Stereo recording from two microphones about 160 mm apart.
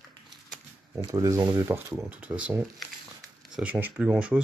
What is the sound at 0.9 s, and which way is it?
Speech, 20° right (ahead or behind).